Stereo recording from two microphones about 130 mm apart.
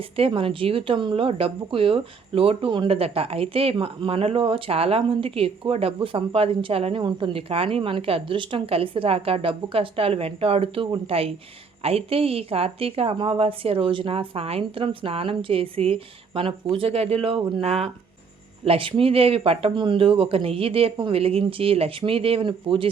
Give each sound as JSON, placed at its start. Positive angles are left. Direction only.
{"t": 0.2, "sound": "speech", "side_deg": -45}